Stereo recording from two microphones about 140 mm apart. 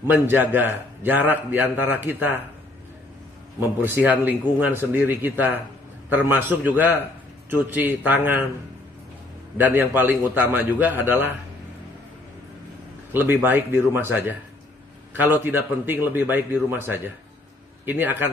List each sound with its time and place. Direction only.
0.0 s a man's voice: 15° right (ahead or behind)
3.5 s a man's voice: 15° right (ahead or behind)
9.6 s a man's voice: 15° right (ahead or behind)
13.1 s a man's voice: 15° right (ahead or behind)